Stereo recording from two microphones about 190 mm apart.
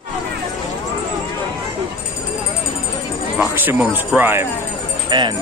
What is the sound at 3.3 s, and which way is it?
Speech, 10° right (ahead or behind).